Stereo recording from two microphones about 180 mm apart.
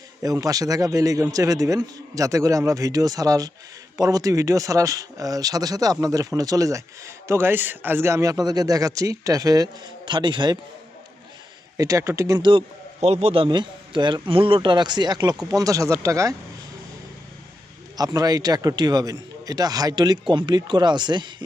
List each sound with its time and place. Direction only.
0.2 s speech: 20° right (ahead or behind)
11.8 s speech: 15° right (ahead or behind)
17.9 s speech: 20° right (ahead or behind)